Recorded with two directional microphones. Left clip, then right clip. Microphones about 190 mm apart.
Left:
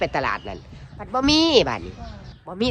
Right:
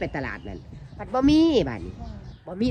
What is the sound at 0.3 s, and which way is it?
Speech, 40° right (ahead or behind).